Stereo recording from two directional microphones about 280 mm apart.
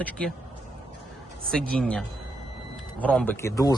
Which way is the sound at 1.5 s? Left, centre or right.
Centre.